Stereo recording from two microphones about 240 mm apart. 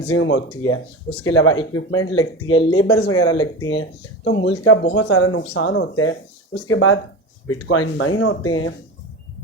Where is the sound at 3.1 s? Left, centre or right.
Centre.